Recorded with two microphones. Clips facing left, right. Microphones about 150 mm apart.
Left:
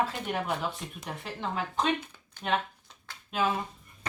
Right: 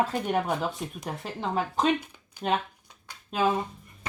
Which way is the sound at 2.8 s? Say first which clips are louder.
Right 1 dB; 15° right (ahead or behind).